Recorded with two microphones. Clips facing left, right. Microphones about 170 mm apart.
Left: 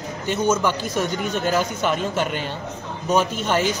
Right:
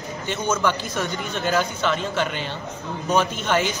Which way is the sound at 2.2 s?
45° left (ahead or behind).